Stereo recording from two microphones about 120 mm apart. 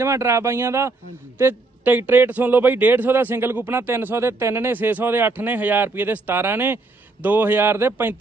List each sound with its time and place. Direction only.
0.0 s a man's voice: 25° right (ahead or behind)